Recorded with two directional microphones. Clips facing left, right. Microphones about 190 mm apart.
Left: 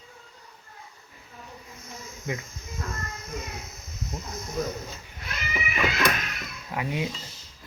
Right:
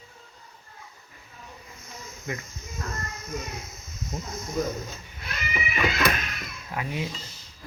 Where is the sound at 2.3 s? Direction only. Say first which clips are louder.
Left 2 dB; 15° left (ahead or behind).